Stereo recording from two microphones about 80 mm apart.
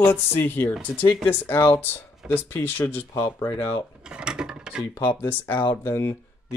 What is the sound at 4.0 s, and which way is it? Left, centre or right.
Mechanisms, centre.